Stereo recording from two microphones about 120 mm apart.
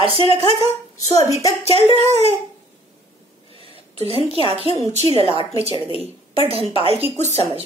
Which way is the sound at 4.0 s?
55° right (ahead or behind).